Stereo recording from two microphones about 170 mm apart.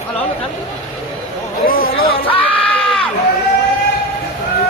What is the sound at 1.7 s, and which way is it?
Speech, 60° left (ahead or behind).